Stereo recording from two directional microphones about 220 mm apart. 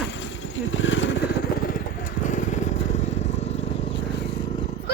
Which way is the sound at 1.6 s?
40° left (ahead or behind).